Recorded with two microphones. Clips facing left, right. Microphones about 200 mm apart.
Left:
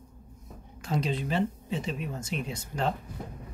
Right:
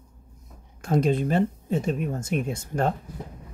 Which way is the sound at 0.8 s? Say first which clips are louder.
Right 8 dB; 50° right (ahead or behind).